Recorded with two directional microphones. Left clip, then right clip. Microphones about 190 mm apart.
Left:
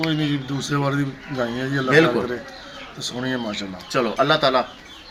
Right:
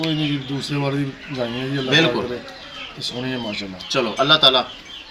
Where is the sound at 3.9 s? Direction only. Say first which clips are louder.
Right 2 dB; 10° left (ahead or behind).